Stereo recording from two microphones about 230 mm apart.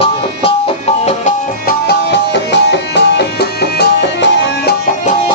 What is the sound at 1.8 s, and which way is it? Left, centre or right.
Music, left.